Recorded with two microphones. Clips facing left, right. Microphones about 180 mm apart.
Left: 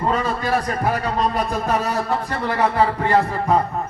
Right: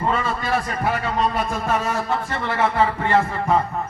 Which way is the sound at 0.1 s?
40° left (ahead or behind).